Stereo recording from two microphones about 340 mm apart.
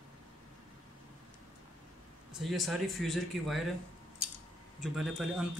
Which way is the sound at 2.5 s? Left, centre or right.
Centre.